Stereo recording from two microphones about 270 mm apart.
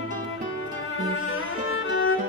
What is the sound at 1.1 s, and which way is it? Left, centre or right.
Music, left.